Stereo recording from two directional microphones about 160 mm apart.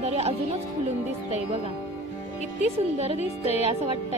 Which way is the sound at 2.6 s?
40° right (ahead or behind).